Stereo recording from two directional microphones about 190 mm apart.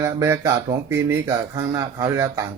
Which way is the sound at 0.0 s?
15° right (ahead or behind).